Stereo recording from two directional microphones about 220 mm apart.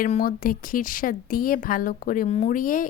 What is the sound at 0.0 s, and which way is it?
Speech, 40° left (ahead or behind).